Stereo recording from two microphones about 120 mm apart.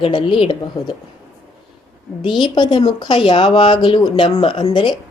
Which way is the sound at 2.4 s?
40° left (ahead or behind).